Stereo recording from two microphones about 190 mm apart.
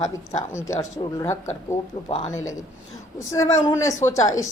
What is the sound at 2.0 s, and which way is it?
Speech, 30° left (ahead or behind).